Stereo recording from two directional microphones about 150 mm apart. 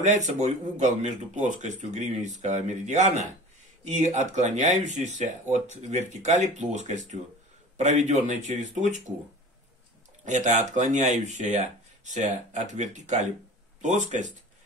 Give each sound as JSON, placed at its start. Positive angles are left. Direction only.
{"t": 0.0, "sound": "speech", "side_deg": -50}
{"t": 10.2, "sound": "speech", "side_deg": -50}